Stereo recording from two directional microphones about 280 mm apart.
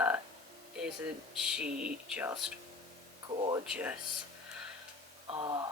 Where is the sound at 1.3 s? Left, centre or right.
Centre.